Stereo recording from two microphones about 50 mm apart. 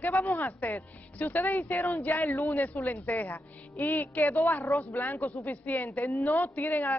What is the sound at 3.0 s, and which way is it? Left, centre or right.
Speech, left.